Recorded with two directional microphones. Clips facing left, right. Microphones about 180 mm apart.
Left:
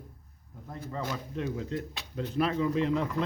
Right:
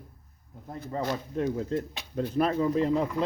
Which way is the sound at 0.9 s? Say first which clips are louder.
Right 5 dB; 35° right (ahead or behind).